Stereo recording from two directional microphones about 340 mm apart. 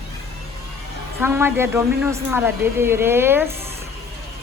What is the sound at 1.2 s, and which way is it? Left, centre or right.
A woman's voice, centre.